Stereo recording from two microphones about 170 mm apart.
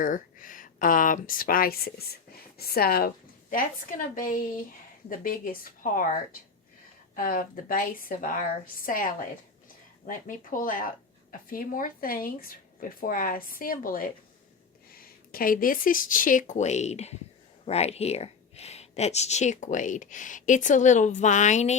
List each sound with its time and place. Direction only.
0.0 s a woman's voice: 50° left (ahead or behind)
3.5 s a woman's voice: 55° left (ahead or behind)
7.2 s a woman's voice: 55° left (ahead or behind)